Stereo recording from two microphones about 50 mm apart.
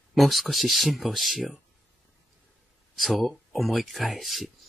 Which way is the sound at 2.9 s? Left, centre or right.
Centre.